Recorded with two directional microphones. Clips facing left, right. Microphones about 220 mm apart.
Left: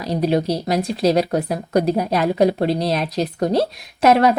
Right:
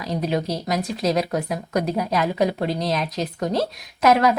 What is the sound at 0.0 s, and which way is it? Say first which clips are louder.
Speech: left 5 dB; 35° left (ahead or behind).